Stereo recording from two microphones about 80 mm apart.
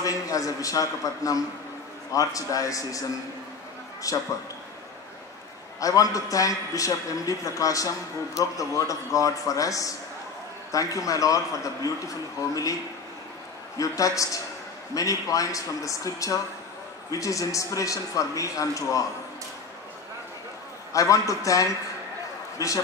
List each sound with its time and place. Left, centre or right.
0.0 s a man's voice: left
5.8 s a man's voice: left
13.7 s a man's voice: left
20.9 s a man's voice: left